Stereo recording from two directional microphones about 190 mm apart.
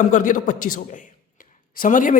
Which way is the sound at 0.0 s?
40° left (ahead or behind).